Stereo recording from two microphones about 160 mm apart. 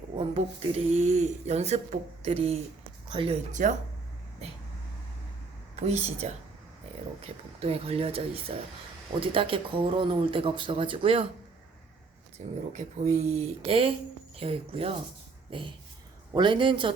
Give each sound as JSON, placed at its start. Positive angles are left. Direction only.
{"t": 0.2, "sound": "speech", "side_deg": -40}
{"t": 3.6, "sound": "speech", "side_deg": -50}
{"t": 5.7, "sound": "speech", "side_deg": -45}
{"t": 7.6, "sound": "speech", "side_deg": -40}
{"t": 12.4, "sound": "speech", "side_deg": -35}
{"t": 12.7, "sound": "a man's voice", "side_deg": -45}